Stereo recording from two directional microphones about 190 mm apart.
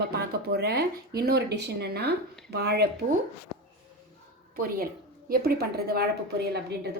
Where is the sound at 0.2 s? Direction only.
60° right (ahead or behind).